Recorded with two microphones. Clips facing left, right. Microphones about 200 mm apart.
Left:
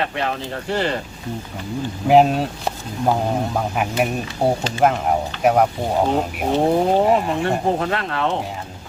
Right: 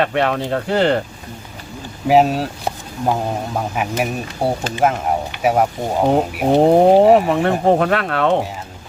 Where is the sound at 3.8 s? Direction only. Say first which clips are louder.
Even; centre (ahead or behind).